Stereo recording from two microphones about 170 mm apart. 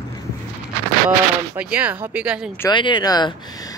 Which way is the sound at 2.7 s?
25° left (ahead or behind).